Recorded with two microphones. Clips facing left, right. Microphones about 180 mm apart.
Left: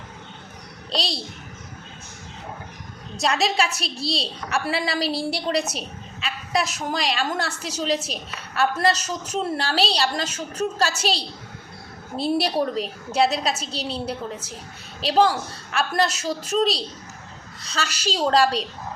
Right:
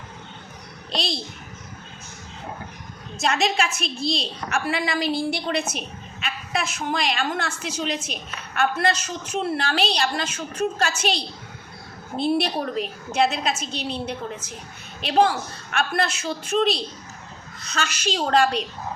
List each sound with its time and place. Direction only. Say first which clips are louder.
0.9 s a child's voice: even; 35° left (ahead or behind)
3.2 s a woman's voice: even; 35° left (ahead or behind)